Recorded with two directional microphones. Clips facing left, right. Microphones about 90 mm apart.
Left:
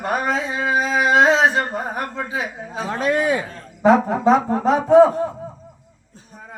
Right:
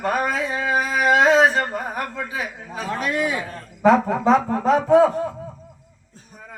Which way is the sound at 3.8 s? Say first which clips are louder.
Left 1 dB; 20° left (ahead or behind).